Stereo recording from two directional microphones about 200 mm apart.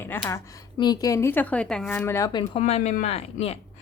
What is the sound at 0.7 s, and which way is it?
Speech, 20° left (ahead or behind).